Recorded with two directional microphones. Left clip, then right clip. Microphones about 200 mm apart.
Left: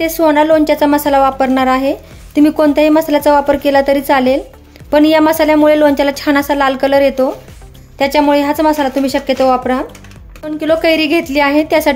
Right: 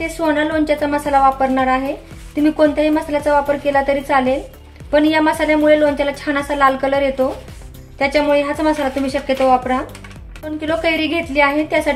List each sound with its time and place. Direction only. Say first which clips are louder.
0.0 s a woman's voice: left 7 dB; 45° left (ahead or behind)